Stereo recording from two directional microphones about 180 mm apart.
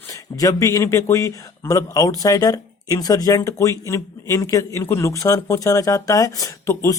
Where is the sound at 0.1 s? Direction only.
20° left (ahead or behind).